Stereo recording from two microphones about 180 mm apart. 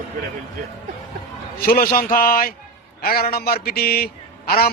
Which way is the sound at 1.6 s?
55° left (ahead or behind).